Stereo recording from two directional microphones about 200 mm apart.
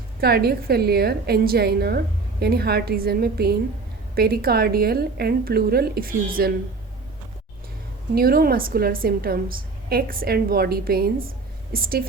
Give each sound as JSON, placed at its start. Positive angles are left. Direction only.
{"t": 0.2, "sound": "a woman's voice", "side_deg": -50}
{"t": 8.1, "sound": "a woman's voice", "side_deg": -50}